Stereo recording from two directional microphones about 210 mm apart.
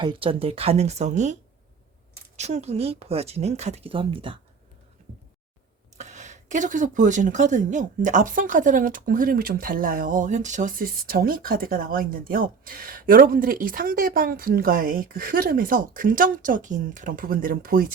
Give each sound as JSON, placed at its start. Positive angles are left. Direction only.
{"t": 0.0, "sound": "speech", "side_deg": -25}
{"t": 6.0, "sound": "a woman's voice", "side_deg": -35}